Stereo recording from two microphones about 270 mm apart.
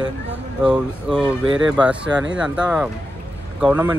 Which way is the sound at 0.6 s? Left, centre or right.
Centre.